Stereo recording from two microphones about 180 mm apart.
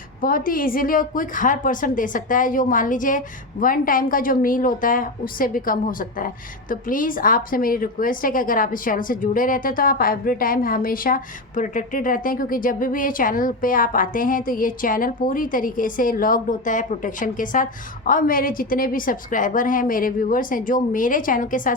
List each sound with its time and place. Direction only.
0.2 s a woman's voice: 50° left (ahead or behind)